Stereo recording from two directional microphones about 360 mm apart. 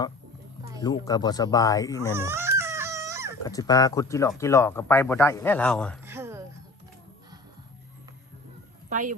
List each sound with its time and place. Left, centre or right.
0.8 s speech: centre
2.1 s baby cry: centre
3.4 s speech: centre
8.9 s a woman's voice: right